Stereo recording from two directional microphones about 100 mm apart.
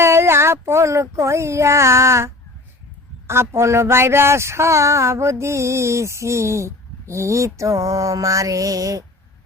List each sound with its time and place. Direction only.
0.0 s speech: 25° right (ahead or behind)